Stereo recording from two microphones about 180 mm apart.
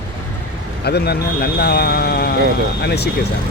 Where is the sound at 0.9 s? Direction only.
60° left (ahead or behind).